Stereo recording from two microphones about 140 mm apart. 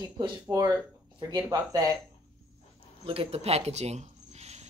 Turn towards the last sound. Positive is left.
turn(degrees=-50)  # may be behind; listen again after turning